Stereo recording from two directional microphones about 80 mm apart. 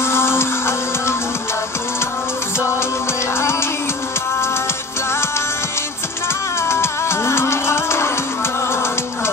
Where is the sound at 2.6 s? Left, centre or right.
Left.